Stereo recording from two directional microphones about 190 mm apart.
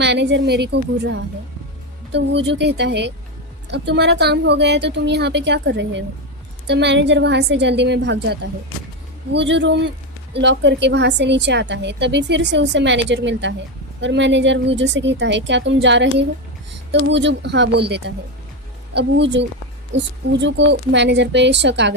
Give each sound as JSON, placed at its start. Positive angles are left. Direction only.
{"t": 0.0, "sound": "a woman's voice", "side_deg": -65}